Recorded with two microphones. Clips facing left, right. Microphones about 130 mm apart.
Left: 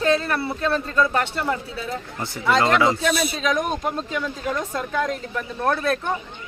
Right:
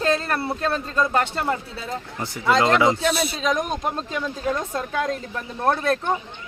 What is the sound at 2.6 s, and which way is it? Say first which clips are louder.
Speech: right 1 dB; 25° right (ahead or behind).